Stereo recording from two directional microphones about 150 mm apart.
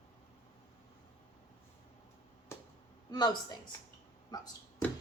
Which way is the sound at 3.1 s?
30° left (ahead or behind).